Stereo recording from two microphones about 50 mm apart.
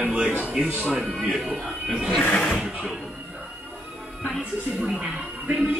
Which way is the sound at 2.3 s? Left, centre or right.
Left.